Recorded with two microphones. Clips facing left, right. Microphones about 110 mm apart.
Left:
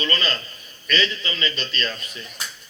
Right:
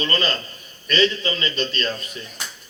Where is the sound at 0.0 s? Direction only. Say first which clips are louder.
Right 2 dB; 35° right (ahead or behind).